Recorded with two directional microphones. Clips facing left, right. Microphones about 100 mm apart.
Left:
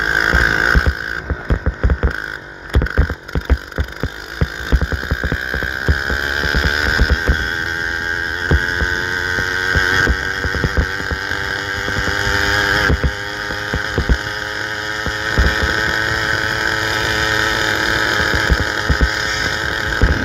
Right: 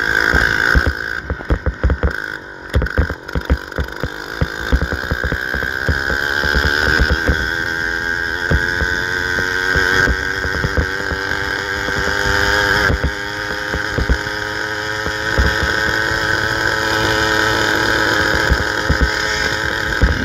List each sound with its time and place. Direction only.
6.3 s hum: 50° right (ahead or behind)
9.5 s vehicle: 25° right (ahead or behind)
12.2 s chainsaw: 30° right (ahead or behind)
15.5 s vehicle: 25° right (ahead or behind)
16.7 s vehicle: 40° right (ahead or behind)